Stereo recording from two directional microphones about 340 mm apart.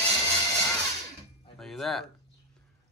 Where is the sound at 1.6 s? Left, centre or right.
Centre.